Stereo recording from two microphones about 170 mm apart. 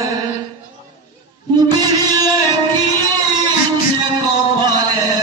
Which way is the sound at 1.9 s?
20° right (ahead or behind).